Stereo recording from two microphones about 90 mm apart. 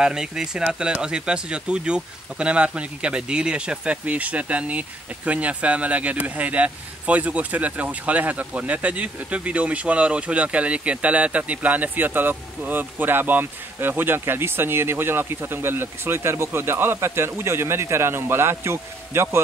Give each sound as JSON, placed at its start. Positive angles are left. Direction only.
{"t": 0.0, "sound": "speech", "side_deg": -5}